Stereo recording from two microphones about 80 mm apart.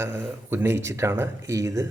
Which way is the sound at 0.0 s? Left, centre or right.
Right.